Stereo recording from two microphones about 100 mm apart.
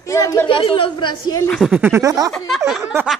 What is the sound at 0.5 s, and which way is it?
Speech, 65° left (ahead or behind).